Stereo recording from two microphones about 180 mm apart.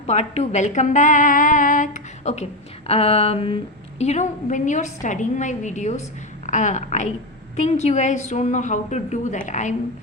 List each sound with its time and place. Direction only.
0.1 s speech: 40° left (ahead or behind)